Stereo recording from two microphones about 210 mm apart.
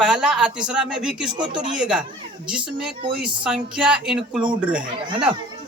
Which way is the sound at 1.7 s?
5° right (ahead or behind).